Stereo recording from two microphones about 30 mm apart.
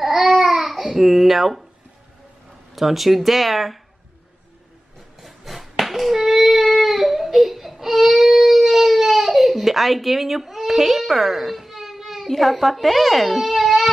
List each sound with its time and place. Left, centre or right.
0.0 s babbling: centre
2.7 s speech: centre
5.2 s a sound: centre